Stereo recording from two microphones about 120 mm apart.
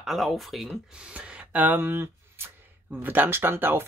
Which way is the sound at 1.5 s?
15° right (ahead or behind).